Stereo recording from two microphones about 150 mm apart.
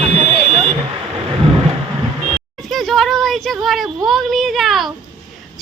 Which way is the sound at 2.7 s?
Centre (ahead or behind).